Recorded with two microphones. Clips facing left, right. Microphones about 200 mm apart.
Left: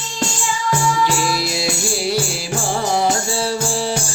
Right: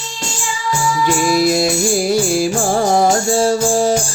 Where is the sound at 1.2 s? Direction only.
50° right (ahead or behind).